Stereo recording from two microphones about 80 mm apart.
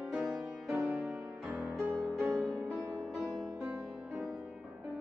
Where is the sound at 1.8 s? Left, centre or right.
Centre.